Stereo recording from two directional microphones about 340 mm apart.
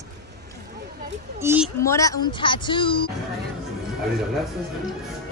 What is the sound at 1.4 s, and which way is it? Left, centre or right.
Speech, centre.